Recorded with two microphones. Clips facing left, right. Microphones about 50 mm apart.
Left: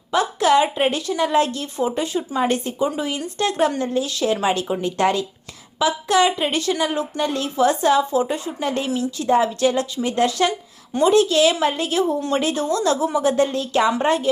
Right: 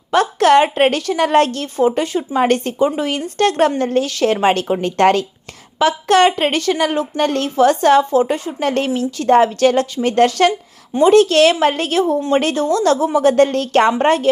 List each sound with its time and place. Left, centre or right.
0.1 s a woman's voice: right
2.5 s a woman's voice: right